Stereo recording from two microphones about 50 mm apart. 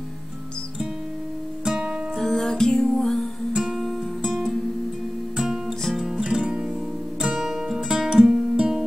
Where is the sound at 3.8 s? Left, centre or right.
Centre.